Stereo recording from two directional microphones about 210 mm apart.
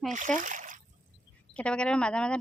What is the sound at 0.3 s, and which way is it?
Speech, 35° right (ahead or behind).